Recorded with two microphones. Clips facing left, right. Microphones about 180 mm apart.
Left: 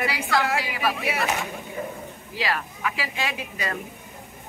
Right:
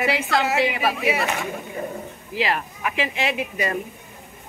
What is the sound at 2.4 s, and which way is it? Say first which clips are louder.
Speech: right 3 dB; 20° right (ahead or behind).